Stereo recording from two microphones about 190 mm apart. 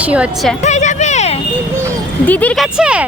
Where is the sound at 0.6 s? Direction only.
40° left (ahead or behind).